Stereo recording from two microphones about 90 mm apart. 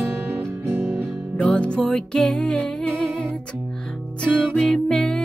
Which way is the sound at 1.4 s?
15° left (ahead or behind).